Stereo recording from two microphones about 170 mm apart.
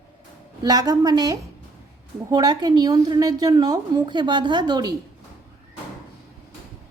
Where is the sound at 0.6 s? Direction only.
20° right (ahead or behind).